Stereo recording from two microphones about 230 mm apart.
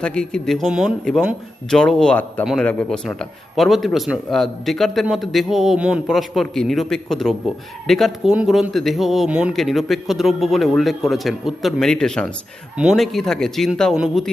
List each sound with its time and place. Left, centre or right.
0.0 s speech: centre